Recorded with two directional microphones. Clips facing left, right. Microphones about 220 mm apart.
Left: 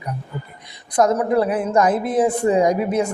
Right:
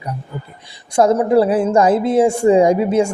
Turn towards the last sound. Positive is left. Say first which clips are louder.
# right 5 dB
turn(degrees=-30)  # may be behind; listen again after turning